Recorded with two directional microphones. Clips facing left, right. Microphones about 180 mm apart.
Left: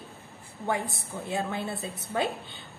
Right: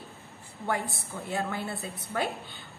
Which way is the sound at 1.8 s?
20° left (ahead or behind).